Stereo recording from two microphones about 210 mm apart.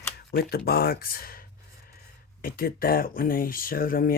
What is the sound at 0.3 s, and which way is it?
Speech, 50° left (ahead or behind).